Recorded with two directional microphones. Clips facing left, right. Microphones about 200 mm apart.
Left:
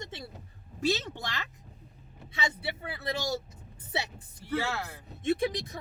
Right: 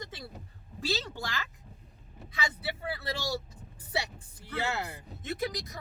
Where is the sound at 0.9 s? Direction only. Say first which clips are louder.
Left 2 dB; 20° left (ahead or behind).